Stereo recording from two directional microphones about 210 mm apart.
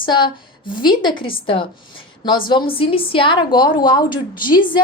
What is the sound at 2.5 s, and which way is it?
A woman's voice, 25° left (ahead or behind).